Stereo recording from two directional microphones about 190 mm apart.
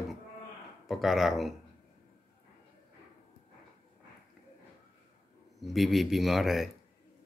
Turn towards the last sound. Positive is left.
turn(degrees=0)  # may be behind; listen again after turning